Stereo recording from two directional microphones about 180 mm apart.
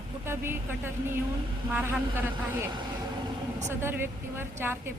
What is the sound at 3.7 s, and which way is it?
A woman's voice, 15° right (ahead or behind).